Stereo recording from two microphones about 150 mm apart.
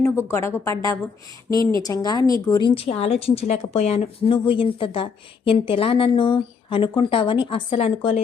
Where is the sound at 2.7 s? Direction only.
40° left (ahead or behind).